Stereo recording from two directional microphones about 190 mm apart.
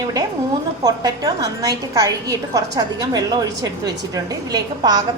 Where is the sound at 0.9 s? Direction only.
20° right (ahead or behind).